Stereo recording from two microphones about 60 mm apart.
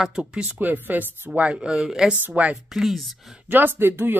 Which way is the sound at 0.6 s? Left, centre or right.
Right.